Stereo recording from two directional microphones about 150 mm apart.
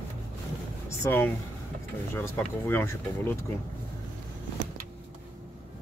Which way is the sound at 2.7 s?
15° left (ahead or behind).